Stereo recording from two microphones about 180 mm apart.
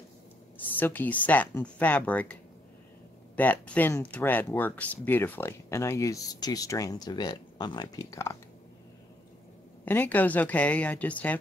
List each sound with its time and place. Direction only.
0.6 s speech: 10° left (ahead or behind)
3.3 s speech: 10° left (ahead or behind)
9.8 s speech: 10° left (ahead or behind)